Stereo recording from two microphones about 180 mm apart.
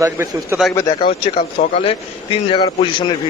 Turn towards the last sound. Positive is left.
turn(degrees=25)  # may be behind; listen again after turning